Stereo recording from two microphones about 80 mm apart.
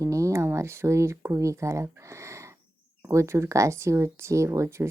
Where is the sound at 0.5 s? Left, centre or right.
Right.